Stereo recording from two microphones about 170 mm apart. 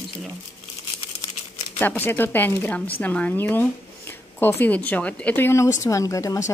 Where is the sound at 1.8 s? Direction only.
10° left (ahead or behind).